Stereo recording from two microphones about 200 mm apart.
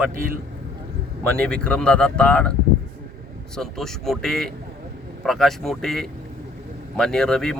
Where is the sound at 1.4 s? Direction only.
5° left (ahead or behind).